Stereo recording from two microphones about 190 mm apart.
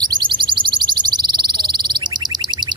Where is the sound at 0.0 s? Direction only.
25° right (ahead or behind).